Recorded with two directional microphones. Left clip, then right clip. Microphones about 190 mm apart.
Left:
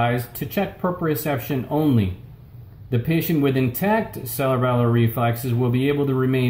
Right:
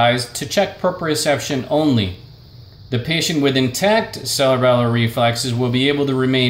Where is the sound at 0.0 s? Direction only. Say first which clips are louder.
Right 7 dB; 15° right (ahead or behind).